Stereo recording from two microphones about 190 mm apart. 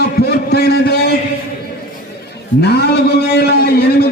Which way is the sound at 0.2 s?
55° left (ahead or behind).